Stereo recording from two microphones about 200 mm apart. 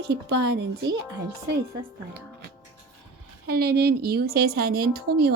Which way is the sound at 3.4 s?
50° right (ahead or behind).